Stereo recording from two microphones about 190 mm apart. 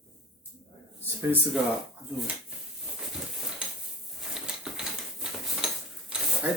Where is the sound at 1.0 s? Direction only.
10° right (ahead or behind).